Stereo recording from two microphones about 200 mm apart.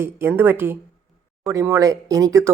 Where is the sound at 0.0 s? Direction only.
10° right (ahead or behind).